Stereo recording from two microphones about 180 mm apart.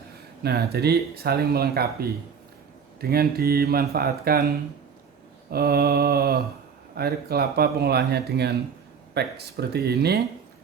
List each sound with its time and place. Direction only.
0.4 s speech: 60° right (ahead or behind)